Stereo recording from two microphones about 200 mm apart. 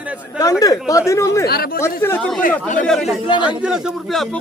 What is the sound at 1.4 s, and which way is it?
Speech, 50° left (ahead or behind).